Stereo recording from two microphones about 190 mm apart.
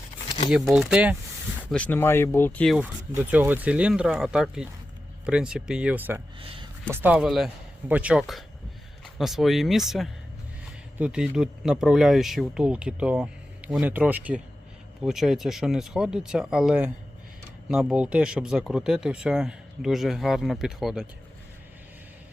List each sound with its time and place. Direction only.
0.3 s crumpling: 30° left (ahead or behind)
0.5 s speech: centre (ahead or behind)
1.7 s speech: 10° left (ahead or behind)
3.1 s speech: 10° right (ahead or behind)
6.4 s a sound: 30° right (ahead or behind)
6.8 s speech: 10° right (ahead or behind)